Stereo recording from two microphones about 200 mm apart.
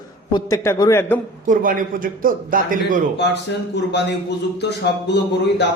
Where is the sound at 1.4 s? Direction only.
40° right (ahead or behind).